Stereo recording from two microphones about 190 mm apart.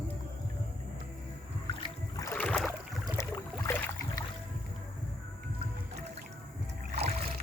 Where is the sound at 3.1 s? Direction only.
15° left (ahead or behind).